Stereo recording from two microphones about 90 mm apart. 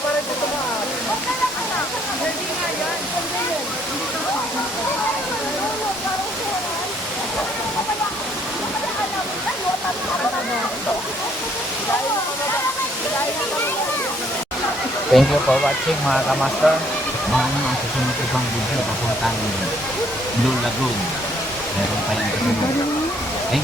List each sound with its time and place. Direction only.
15.1 s speech: centre (ahead or behind)